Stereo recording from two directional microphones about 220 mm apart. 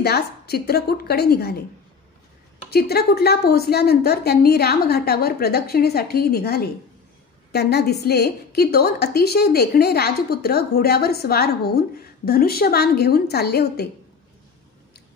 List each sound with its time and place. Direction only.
0.0 s a woman's voice: 45° left (ahead or behind)
2.7 s a woman's voice: 45° left (ahead or behind)